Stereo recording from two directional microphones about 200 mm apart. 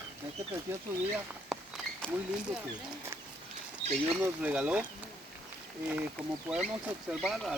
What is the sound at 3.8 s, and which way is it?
Speech, 30° right (ahead or behind).